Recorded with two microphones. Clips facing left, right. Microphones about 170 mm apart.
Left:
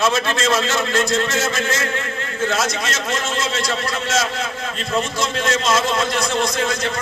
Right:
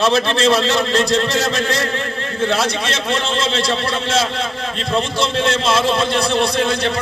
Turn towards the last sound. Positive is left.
turn(degrees=-30)  # may be behind; listen again after turning